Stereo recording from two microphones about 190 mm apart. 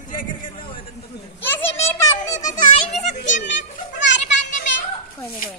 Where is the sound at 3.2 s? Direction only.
40° left (ahead or behind).